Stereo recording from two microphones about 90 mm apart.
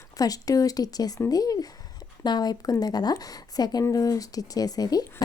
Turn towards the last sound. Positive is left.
turn(degrees=45)  # may be behind; listen again after turning